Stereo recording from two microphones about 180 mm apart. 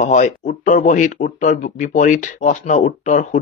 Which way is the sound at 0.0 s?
45° left (ahead or behind).